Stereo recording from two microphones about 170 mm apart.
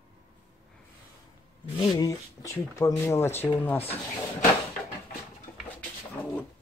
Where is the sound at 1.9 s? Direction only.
20° left (ahead or behind).